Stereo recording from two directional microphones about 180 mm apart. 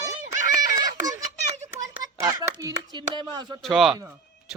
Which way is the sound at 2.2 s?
20° right (ahead or behind).